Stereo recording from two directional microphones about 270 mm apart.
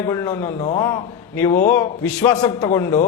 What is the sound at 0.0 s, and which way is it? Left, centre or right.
Speech, centre.